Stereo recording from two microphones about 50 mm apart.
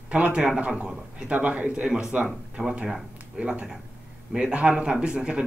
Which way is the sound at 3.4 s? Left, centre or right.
Centre.